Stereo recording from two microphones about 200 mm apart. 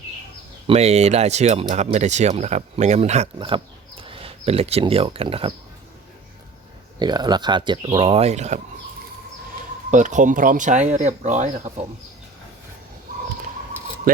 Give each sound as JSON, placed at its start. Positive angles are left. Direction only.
{"t": 0.7, "sound": "speech", "side_deg": -30}
{"t": 7.0, "sound": "speech", "side_deg": -20}
{"t": 9.9, "sound": "speech", "side_deg": -40}